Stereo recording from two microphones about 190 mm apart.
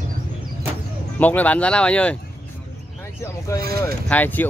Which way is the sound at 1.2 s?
10° left (ahead or behind).